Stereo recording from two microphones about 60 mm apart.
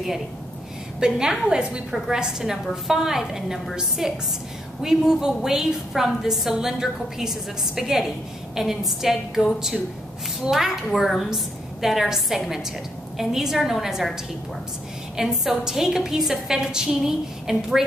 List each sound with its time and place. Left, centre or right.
0.9 s a woman's voice: centre
15.1 s a woman's voice: centre